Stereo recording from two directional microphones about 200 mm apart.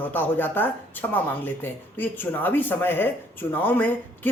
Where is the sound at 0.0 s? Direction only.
10° left (ahead or behind).